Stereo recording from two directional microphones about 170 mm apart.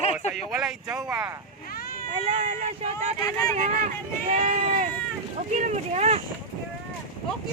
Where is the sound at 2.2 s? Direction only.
40° right (ahead or behind).